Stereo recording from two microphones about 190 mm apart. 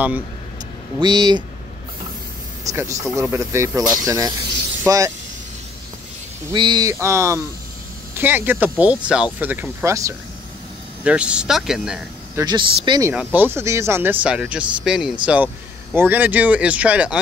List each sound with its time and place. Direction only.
0.9 s speech: 20° right (ahead or behind)
2.6 s speech: 15° right (ahead or behind)
6.5 s speech: 25° right (ahead or behind)
11.1 s speech: 5° right (ahead or behind)
12.4 s speech: 25° right (ahead or behind)
13.1 s speech: 10° right (ahead or behind)